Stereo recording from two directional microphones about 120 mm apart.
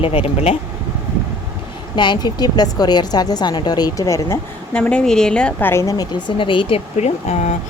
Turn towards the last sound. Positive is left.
turn(degrees=80)